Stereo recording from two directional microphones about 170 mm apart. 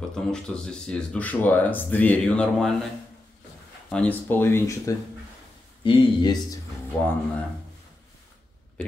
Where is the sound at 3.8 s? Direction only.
5° left (ahead or behind).